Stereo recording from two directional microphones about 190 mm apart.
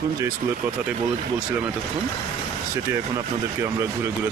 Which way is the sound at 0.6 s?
5° right (ahead or behind).